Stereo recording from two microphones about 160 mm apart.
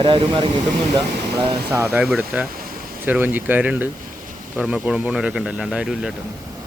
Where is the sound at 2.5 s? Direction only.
65° right (ahead or behind).